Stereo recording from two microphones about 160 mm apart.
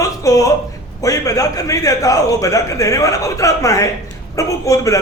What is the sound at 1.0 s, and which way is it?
A man's voice, 20° left (ahead or behind).